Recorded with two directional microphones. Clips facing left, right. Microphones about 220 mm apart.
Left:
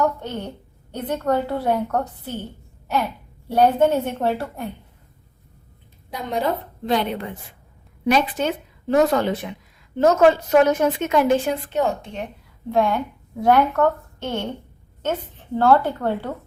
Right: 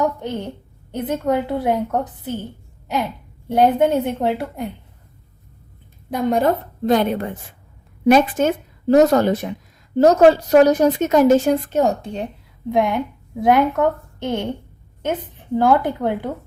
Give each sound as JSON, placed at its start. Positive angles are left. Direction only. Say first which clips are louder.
{"t": 0.9, "sound": "a woman's voice", "louder": "right 2 dB", "side_deg": -20}
{"t": 3.5, "sound": "a woman's voice", "louder": "right 1 dB", "side_deg": -20}
{"t": 6.1, "sound": "a woman's voice", "louder": "right 6 dB", "side_deg": -50}
{"t": 12.7, "sound": "a woman's voice", "louder": "right 1 dB", "side_deg": -15}